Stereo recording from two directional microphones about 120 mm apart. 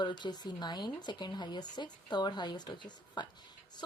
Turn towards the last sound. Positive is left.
turn(degrees=40)  # may be behind; listen again after turning